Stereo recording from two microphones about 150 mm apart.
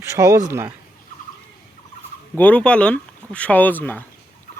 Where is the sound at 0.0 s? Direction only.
20° right (ahead or behind).